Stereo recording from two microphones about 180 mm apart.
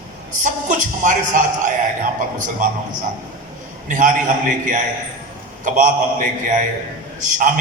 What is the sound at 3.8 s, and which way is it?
A man's voice, 45° right (ahead or behind).